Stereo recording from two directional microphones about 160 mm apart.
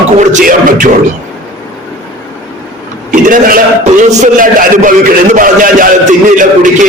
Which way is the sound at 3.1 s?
55° right (ahead or behind).